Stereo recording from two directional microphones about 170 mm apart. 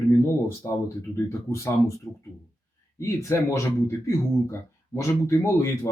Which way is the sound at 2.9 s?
15° left (ahead or behind).